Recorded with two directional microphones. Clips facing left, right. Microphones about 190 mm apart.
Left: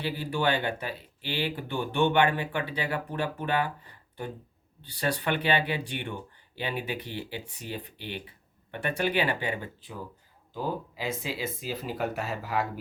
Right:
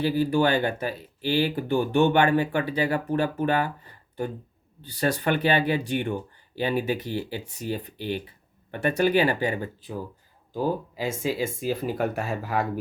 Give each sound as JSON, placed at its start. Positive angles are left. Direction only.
{"t": 0.0, "sound": "speech", "side_deg": -40}